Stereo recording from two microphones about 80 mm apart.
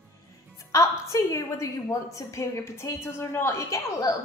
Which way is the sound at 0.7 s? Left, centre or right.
Left.